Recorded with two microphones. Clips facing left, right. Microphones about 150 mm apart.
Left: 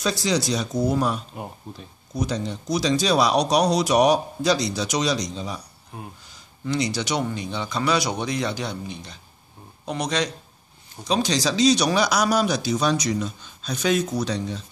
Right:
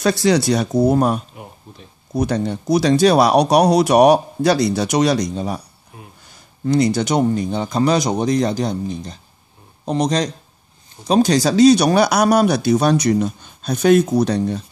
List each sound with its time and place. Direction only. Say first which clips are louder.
0.0 s speech: right 8 dB; 60° right (ahead or behind)
6.2 s a sound: right 10 dB; 50° right (ahead or behind)
7.2 s a man's voice: right 9 dB; 45° right (ahead or behind)